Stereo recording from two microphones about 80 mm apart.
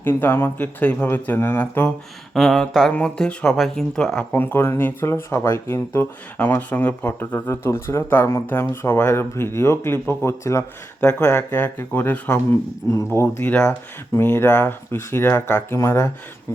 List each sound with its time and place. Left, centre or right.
0.0 s speech: left
0.8 s speech: centre
2.3 s a sound: centre
2.9 s speech: centre
4.3 s speech: left
7.3 s speech: left